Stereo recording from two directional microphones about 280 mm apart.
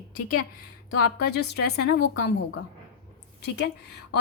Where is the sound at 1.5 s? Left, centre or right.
Left.